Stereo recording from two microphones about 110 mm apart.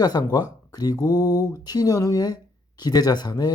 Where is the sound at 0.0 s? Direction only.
35° left (ahead or behind).